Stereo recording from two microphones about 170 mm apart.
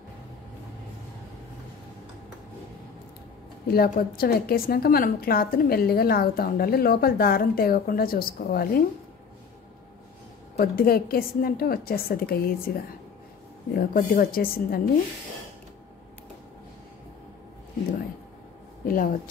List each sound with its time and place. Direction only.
3.6 s a woman's voice: 65° left (ahead or behind)
10.6 s a woman's voice: 60° left (ahead or behind)
13.7 s a woman's voice: 60° left (ahead or behind)
18.9 s speech: 55° left (ahead or behind)